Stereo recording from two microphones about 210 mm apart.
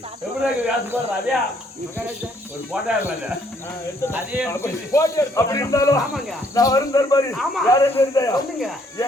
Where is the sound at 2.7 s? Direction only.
5° right (ahead or behind).